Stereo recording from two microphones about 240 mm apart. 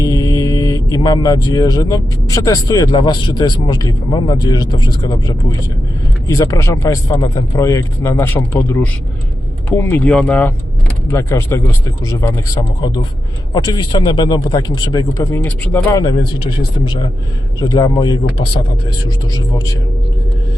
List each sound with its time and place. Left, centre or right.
0.0 s a man's voice: centre
13.5 s a man's voice: centre